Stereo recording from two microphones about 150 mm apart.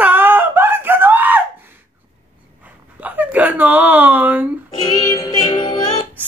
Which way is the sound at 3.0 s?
10° right (ahead or behind).